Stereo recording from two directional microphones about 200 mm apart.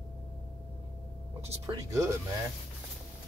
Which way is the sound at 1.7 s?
15° right (ahead or behind).